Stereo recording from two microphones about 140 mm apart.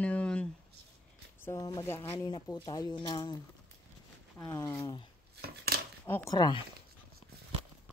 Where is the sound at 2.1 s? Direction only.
30° left (ahead or behind).